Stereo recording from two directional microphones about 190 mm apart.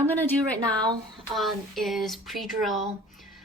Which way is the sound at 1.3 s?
Centre (ahead or behind).